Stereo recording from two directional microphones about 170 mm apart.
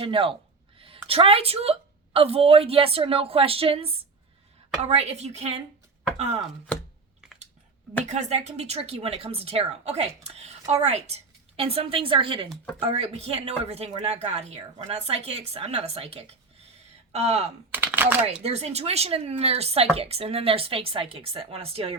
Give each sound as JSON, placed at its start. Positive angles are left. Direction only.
{"t": 0.0, "sound": "a woman's voice", "side_deg": -30}
{"t": 8.0, "sound": "a woman's voice", "side_deg": -40}
{"t": 12.5, "sound": "speech", "side_deg": 0}
{"t": 12.8, "sound": "a woman's voice", "side_deg": -35}
{"t": 17.7, "sound": "speech", "side_deg": -10}
{"t": 18.4, "sound": "a woman's voice", "side_deg": -40}